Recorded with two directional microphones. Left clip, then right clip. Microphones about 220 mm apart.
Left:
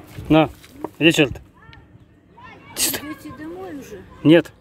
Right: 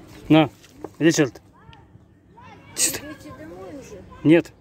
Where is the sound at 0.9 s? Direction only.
Centre (ahead or behind).